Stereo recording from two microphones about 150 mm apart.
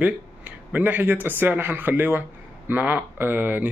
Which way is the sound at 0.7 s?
10° right (ahead or behind).